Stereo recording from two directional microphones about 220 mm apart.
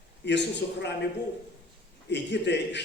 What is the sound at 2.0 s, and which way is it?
Speech, 50° left (ahead or behind).